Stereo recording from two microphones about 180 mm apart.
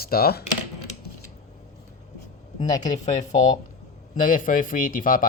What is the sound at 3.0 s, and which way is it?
Speech, 40° left (ahead or behind).